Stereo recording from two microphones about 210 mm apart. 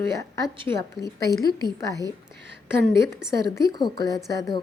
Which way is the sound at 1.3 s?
15° left (ahead or behind).